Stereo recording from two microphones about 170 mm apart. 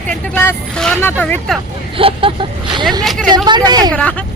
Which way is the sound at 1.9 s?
30° right (ahead or behind).